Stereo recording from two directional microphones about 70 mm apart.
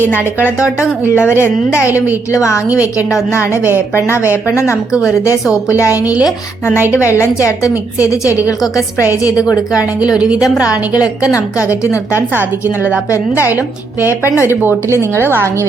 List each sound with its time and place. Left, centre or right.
0.6 s a woman's voice: left
4.9 s speech: centre
5.6 s speech: left
5.9 s a woman's voice: centre
6.9 s speech: left
10.0 s a woman's voice: centre
11.8 s speech: left
12.3 s a woman's voice: right
14.1 s speech: left
14.6 s speech: right